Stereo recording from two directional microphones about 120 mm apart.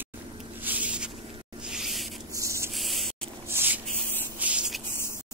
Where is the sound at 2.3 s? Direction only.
25° right (ahead or behind).